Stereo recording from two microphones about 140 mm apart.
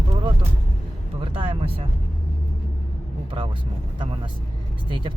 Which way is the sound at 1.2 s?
40° right (ahead or behind).